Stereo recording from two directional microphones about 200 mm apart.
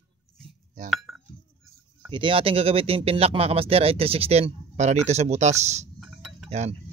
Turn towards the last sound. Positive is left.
turn(degrees=-35)  # may be behind; listen again after turning